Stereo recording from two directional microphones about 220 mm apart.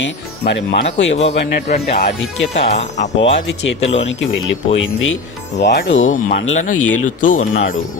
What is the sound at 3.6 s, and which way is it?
Speech, 55° left (ahead or behind).